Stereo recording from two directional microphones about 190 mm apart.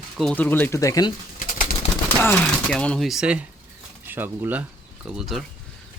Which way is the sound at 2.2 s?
10° left (ahead or behind).